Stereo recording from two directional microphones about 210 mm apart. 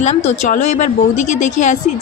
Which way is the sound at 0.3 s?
35° left (ahead or behind).